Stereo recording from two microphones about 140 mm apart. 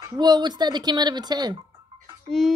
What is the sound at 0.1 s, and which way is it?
Speech, 30° right (ahead or behind).